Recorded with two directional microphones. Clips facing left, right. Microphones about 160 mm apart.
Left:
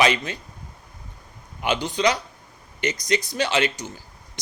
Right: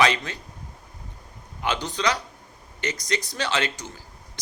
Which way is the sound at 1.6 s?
15° left (ahead or behind).